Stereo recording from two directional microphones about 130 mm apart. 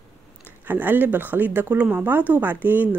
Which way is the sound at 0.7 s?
15° right (ahead or behind).